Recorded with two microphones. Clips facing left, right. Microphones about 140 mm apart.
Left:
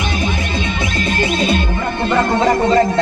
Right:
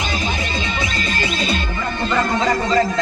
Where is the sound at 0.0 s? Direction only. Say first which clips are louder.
Left 3 dB; 55° left (ahead or behind).